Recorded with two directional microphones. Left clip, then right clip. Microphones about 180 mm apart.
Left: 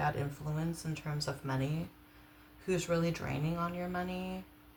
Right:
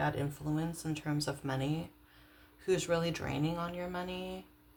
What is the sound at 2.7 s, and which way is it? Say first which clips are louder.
Speech: right 2 dB; 45° right (ahead or behind).